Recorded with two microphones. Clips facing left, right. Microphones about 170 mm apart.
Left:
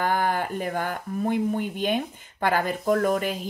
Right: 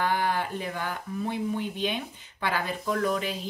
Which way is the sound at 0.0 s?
50° left (ahead or behind).